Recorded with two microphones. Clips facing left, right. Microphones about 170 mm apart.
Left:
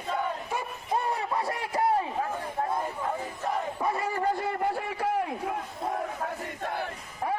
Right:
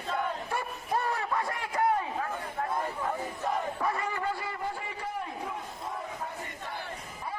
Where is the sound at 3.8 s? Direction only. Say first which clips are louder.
Left 3 dB; 25° left (ahead or behind); by 5.6 s 70° left (ahead or behind).